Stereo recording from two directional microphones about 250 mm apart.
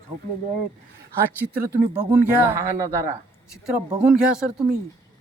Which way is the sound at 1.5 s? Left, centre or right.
Centre.